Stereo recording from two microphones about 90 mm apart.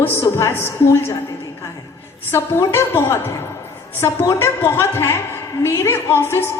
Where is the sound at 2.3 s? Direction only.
25° left (ahead or behind).